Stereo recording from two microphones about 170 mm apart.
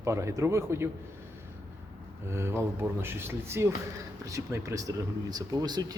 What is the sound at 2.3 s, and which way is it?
Speech, 15° right (ahead or behind).